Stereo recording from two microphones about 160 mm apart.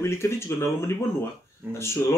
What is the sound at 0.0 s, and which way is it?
Speech, 15° left (ahead or behind).